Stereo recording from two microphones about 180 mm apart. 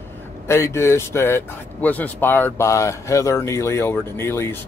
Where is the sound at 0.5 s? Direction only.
15° left (ahead or behind).